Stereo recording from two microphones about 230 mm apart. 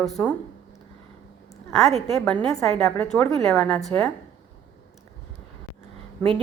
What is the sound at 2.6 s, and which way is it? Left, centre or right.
A woman's voice, centre.